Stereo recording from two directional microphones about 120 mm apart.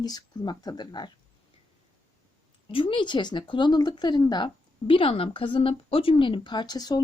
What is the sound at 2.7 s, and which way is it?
Speech, 45° left (ahead or behind).